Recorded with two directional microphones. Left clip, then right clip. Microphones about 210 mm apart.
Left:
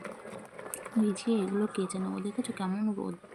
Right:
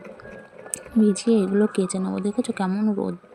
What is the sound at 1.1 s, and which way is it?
Speech, 30° right (ahead or behind).